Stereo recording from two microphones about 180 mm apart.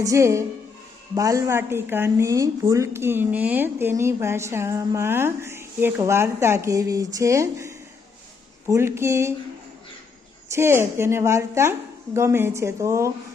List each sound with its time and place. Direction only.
0.0 s a woman's voice: 15° right (ahead or behind)
10.5 s a woman's voice: 15° right (ahead or behind)